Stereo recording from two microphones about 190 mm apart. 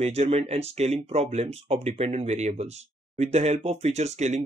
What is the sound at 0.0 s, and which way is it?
Speech, 35° right (ahead or behind).